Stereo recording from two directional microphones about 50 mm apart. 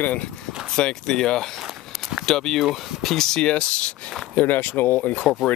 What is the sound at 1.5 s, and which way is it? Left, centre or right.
Walk, centre.